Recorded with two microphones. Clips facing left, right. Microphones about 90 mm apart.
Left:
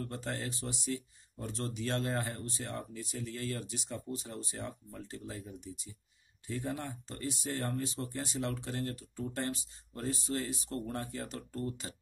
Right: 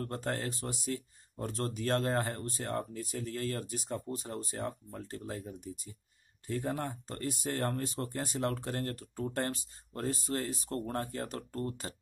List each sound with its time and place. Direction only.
0.0 s speech: 45° right (ahead or behind)